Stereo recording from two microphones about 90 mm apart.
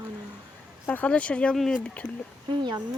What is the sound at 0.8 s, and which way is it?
Speech, 15° left (ahead or behind).